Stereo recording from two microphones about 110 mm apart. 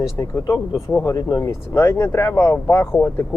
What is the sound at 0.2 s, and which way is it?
Speech, 30° left (ahead or behind).